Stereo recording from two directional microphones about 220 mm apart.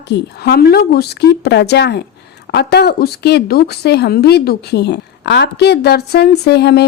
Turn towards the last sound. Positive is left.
turn(degrees=50)  # may be behind; listen again after turning